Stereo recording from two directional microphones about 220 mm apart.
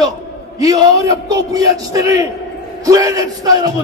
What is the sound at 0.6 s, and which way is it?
A man's voice, 15° right (ahead or behind).